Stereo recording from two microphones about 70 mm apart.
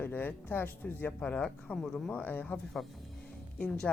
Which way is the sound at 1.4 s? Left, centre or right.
Centre.